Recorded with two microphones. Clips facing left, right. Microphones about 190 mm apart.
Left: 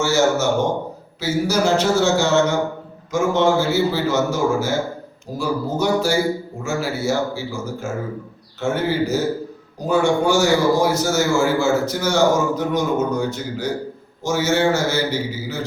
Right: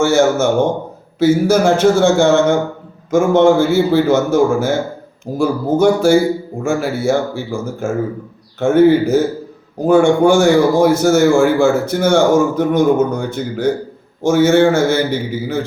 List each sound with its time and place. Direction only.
0.0 s a man's voice: 55° right (ahead or behind)